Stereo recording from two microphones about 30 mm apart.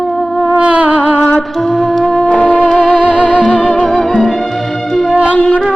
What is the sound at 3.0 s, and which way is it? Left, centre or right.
Music, right.